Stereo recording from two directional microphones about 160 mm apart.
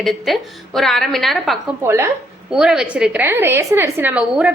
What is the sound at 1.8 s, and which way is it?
Speech, 15° right (ahead or behind).